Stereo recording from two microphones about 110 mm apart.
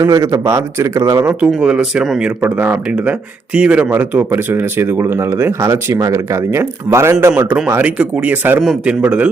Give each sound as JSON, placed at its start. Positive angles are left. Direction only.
{"t": 0.0, "sound": "speech", "side_deg": -30}
{"t": 1.4, "sound": "speech", "side_deg": -10}
{"t": 2.4, "sound": "speech", "side_deg": -15}
{"t": 7.5, "sound": "speech", "side_deg": -15}